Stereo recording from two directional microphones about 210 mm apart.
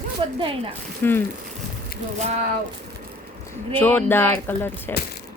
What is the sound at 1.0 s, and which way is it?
Speech, 10° left (ahead or behind).